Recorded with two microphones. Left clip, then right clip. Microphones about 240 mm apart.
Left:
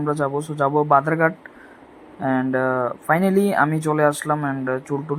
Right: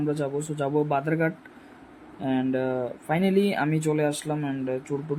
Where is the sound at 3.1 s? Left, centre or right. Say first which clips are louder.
Left 3 dB; left.